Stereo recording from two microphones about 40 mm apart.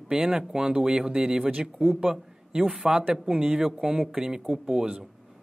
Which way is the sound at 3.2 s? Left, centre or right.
Centre.